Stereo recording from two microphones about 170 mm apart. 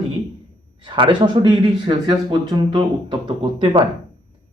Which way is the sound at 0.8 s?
25° right (ahead or behind).